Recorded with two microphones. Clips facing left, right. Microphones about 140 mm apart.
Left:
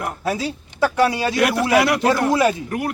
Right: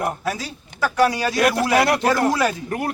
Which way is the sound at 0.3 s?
25° left (ahead or behind).